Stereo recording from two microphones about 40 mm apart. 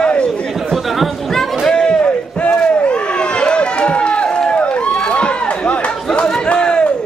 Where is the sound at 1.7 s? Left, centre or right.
Centre.